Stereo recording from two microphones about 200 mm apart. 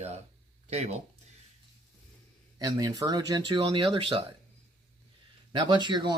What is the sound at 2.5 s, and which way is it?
Speech, 20° right (ahead or behind).